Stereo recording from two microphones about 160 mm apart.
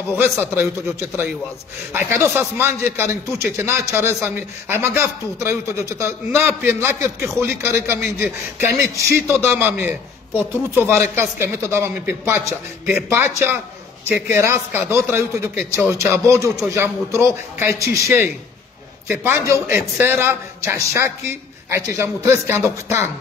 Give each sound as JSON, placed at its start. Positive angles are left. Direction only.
{"t": 0.6, "sound": "a man's voice", "side_deg": -15}